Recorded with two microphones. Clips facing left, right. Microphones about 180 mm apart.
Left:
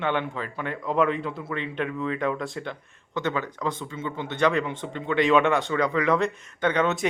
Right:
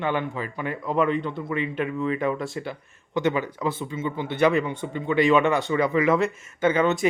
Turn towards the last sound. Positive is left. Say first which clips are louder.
# right 3 dB
turn(degrees=0)  # may be behind; listen again after turning